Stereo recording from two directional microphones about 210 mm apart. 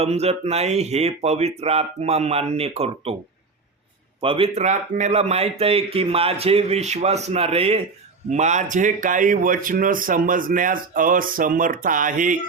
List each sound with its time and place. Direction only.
0.0 s speech: 30° right (ahead or behind)
4.2 s speech: 25° right (ahead or behind)